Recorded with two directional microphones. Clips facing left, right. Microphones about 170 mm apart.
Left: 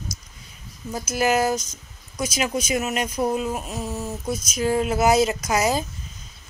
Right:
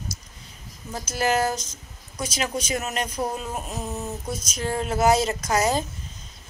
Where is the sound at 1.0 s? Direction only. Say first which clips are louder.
Left 2 dB; 10° left (ahead or behind).